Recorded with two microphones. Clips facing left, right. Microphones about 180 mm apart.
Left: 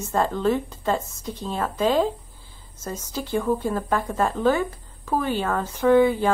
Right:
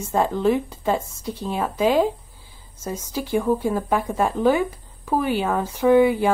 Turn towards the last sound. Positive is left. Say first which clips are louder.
# right 1 dB
turn(degrees=-10)  # may be behind; listen again after turning